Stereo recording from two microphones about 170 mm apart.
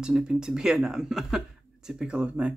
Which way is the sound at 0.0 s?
5° right (ahead or behind).